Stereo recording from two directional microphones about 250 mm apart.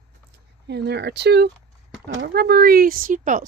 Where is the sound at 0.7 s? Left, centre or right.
Right.